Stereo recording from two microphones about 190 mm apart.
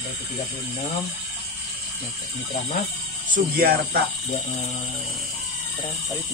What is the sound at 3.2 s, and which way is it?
Speech, 50° right (ahead or behind).